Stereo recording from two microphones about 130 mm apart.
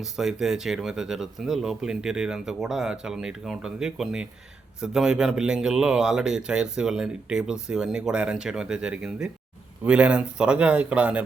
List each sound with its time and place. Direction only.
0.0 s speech: 5° right (ahead or behind)